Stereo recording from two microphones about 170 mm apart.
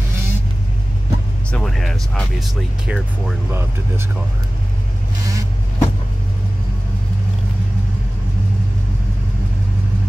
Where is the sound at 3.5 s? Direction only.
15° right (ahead or behind).